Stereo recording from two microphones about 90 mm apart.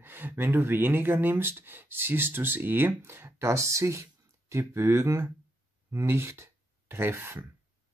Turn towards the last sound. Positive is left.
turn(degrees=-30)  # may be behind; listen again after turning